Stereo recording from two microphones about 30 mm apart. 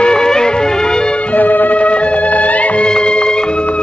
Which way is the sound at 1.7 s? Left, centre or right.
Left.